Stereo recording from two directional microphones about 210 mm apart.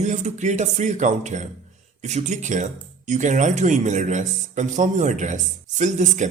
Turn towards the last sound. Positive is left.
turn(degrees=-35)  # may be behind; listen again after turning